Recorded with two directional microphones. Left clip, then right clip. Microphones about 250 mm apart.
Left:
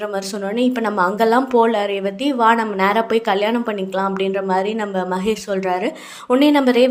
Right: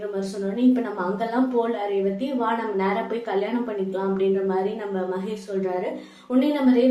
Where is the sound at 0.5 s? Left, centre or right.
Left.